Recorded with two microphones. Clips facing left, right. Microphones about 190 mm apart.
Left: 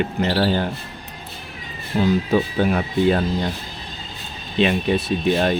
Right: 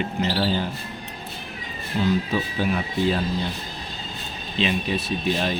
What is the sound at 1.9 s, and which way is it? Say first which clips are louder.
Speech: left 5 dB; 50° left (ahead or behind).